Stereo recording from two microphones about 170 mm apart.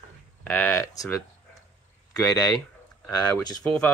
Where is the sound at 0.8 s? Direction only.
20° left (ahead or behind).